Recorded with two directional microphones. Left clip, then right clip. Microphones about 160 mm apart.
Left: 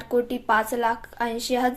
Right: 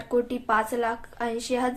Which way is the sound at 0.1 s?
20° left (ahead or behind).